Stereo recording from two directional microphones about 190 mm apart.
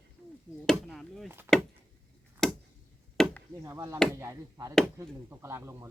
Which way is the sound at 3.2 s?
5° left (ahead or behind).